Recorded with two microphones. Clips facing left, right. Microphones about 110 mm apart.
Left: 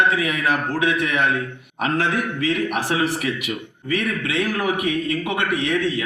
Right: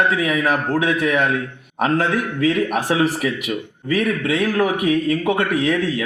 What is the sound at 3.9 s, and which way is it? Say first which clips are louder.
A man's voice: right 4 dB; 45° right (ahead or behind).